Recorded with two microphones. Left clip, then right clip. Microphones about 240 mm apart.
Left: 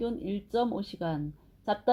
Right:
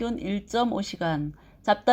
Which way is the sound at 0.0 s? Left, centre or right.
Right.